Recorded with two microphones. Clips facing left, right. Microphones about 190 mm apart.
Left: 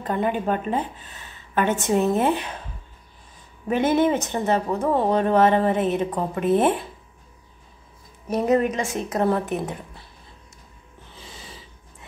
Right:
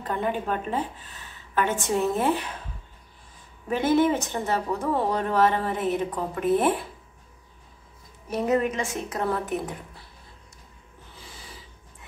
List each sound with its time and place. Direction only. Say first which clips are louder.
0.1 s speech: left 4 dB; 15° left (ahead or behind)
3.7 s speech: left 2 dB; 20° left (ahead or behind)
8.3 s a woman's voice: left 4 dB; 40° left (ahead or behind)
9.2 s speech: left 5 dB; 20° left (ahead or behind)
11.1 s snort: left 3 dB; 20° left (ahead or behind)